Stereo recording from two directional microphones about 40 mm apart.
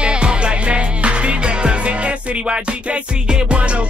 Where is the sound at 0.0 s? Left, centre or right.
Right.